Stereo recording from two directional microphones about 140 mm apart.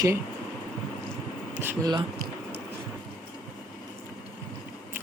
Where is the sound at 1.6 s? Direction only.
30° right (ahead or behind).